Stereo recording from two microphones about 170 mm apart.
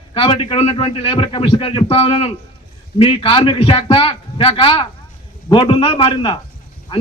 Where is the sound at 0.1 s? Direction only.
30° left (ahead or behind).